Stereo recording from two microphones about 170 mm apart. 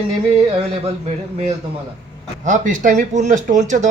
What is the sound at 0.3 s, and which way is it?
Speech, 35° right (ahead or behind).